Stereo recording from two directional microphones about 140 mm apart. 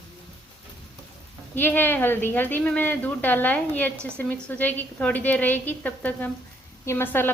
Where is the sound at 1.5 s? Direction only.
15° left (ahead or behind).